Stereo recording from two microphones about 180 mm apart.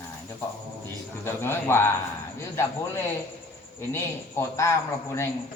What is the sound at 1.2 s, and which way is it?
Speech, 15° left (ahead or behind).